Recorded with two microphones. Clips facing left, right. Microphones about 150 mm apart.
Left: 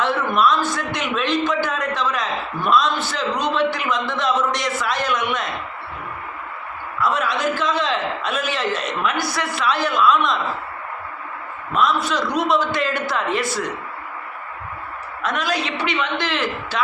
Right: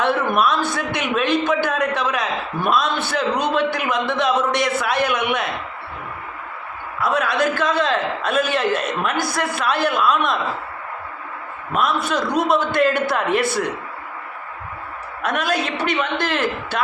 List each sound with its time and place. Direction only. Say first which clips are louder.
0.3 s a man's voice: left 1 dB; 60° right (ahead or behind)
7.0 s a man's voice: right 2 dB; 55° right (ahead or behind)
11.7 s a man's voice: even; 55° right (ahead or behind)
15.2 s a man's voice: right 2 dB; 55° right (ahead or behind)